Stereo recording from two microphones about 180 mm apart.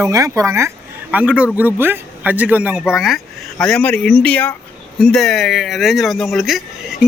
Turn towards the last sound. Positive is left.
turn(degrees=0)  # may be behind; listen again after turning